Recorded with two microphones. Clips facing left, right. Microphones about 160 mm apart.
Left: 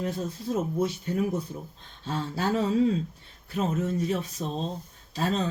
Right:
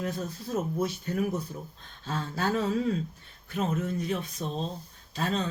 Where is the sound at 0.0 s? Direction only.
30° left (ahead or behind).